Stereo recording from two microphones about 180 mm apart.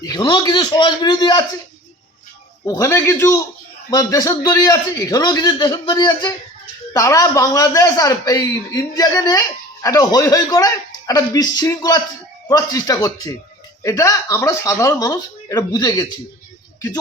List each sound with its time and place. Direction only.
0.0 s a man's voice: 20° left (ahead or behind)
2.6 s a man's voice: 15° left (ahead or behind)